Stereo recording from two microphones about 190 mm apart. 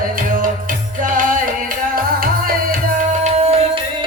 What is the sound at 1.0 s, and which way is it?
Music, 45° right (ahead or behind).